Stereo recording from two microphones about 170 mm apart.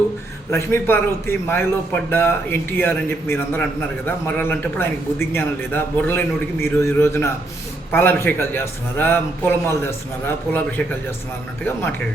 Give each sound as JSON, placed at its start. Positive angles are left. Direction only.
{"t": 0.5, "sound": "a man's voice", "side_deg": 15}